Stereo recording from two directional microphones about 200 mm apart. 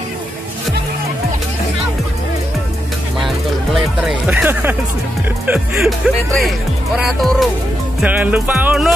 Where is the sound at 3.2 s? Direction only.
Centre (ahead or behind).